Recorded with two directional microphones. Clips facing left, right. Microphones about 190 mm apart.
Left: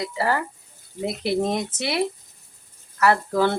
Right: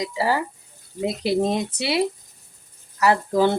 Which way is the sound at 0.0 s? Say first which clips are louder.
Right 1 dB; 15° right (ahead or behind).